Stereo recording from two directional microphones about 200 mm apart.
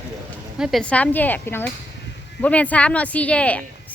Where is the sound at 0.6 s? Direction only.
Centre (ahead or behind).